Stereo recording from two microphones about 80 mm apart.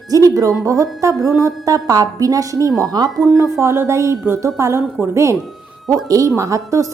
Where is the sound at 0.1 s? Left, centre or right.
Right.